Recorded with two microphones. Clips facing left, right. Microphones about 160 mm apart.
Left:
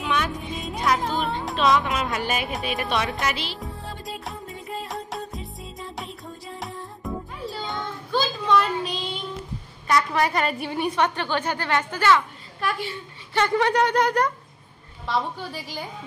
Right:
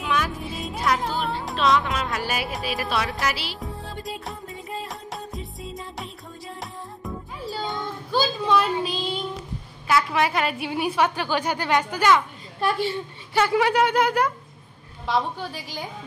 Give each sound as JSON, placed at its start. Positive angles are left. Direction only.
{"t": 0.0, "sound": "music", "side_deg": 0}
{"t": 7.4, "sound": "child singing", "side_deg": 0}
{"t": 9.8, "sound": "a woman's voice", "side_deg": 0}
{"t": 12.5, "sound": "a woman's voice", "side_deg": -30}
{"t": 13.3, "sound": "a woman's voice", "side_deg": -5}